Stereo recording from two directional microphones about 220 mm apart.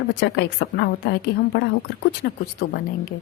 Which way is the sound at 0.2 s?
50° left (ahead or behind).